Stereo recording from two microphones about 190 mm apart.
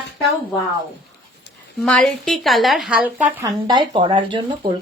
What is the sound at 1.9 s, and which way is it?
A woman's voice, 5° left (ahead or behind).